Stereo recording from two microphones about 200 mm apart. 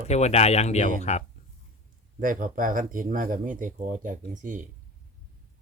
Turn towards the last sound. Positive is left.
turn(degrees=-40)  # may be behind; listen again after turning